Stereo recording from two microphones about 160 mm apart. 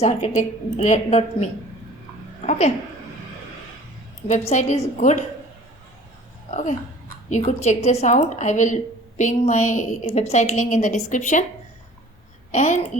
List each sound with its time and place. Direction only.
0.0 s a woman's voice: 45° left (ahead or behind)
2.5 s a woman's voice: 45° left (ahead or behind)
4.3 s a woman's voice: 45° left (ahead or behind)
6.5 s a woman's voice: 50° left (ahead or behind)
12.5 s a child's voice: 45° left (ahead or behind)